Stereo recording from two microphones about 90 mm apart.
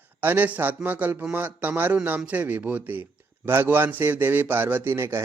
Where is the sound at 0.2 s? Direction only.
20° right (ahead or behind).